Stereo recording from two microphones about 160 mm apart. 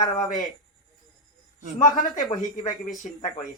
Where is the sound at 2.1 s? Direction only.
25° left (ahead or behind).